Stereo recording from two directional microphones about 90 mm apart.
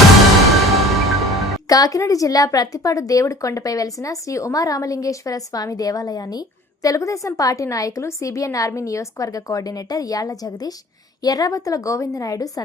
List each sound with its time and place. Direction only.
0.5 s music: centre (ahead or behind)
1.6 s a woman's voice: 45° left (ahead or behind)